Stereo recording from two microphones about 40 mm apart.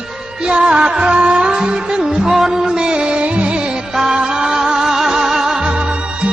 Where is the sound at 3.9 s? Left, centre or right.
Centre.